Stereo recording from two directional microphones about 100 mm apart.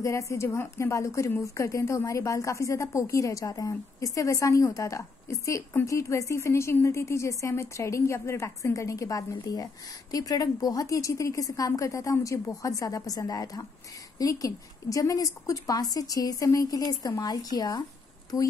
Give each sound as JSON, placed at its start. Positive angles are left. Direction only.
{"t": 0.0, "sound": "speech", "side_deg": 30}